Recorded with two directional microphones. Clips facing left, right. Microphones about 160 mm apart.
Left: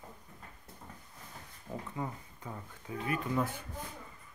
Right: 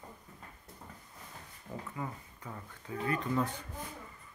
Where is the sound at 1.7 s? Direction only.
10° left (ahead or behind).